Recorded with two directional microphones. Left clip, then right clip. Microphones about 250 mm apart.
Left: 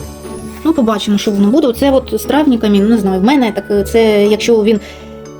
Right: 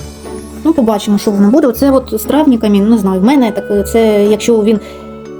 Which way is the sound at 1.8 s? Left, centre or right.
Centre.